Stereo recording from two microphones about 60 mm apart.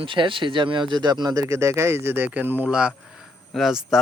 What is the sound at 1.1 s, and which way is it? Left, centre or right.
Speech, right.